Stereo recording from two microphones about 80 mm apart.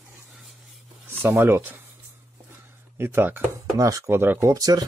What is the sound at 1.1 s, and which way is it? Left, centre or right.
Speech, right.